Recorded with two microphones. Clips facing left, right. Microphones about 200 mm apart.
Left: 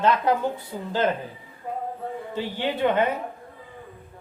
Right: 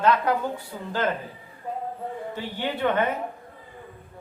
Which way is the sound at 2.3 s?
20° left (ahead or behind).